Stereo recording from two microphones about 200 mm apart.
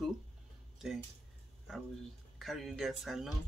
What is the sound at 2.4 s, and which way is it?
Speech, centre (ahead or behind).